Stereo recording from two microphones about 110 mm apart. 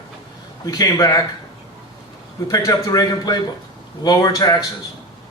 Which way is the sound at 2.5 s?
35° left (ahead or behind).